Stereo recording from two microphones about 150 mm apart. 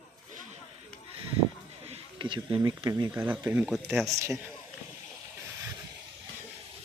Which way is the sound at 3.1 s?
10° right (ahead or behind).